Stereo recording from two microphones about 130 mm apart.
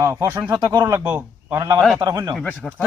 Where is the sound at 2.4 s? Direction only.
Centre (ahead or behind).